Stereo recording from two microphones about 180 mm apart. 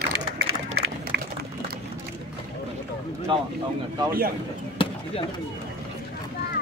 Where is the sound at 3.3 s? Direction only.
25° right (ahead or behind).